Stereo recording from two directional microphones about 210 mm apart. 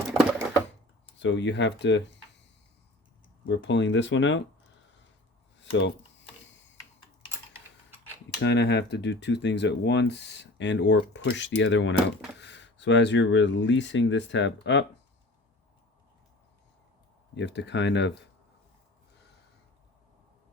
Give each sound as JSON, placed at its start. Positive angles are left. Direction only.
{"t": 0.1, "sound": "a sound", "side_deg": -5}
{"t": 1.2, "sound": "speech", "side_deg": 60}
{"t": 3.4, "sound": "speech", "side_deg": 60}
{"t": 8.4, "sound": "speech", "side_deg": 55}
{"t": 17.3, "sound": "speech", "side_deg": 55}